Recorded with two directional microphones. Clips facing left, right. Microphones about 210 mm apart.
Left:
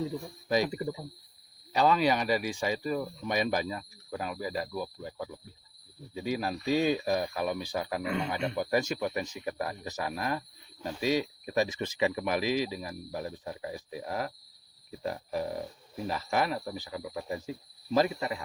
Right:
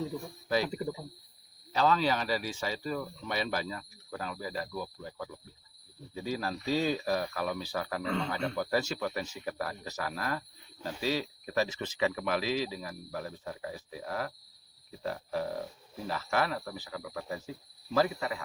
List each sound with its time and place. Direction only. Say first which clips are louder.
0.4 s speech: left 2 dB; 15° left (ahead or behind)
1.7 s speech: left 2 dB; 15° left (ahead or behind)